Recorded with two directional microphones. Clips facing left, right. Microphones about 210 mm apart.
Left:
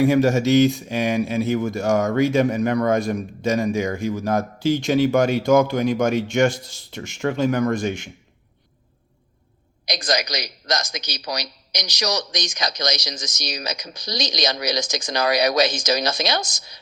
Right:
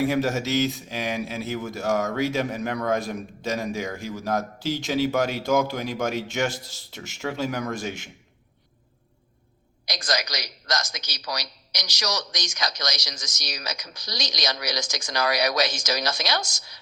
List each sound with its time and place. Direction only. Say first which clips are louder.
0.0 s speech: left 7 dB; centre (ahead or behind)
9.8 s a man's voice: left 5 dB; 15° left (ahead or behind)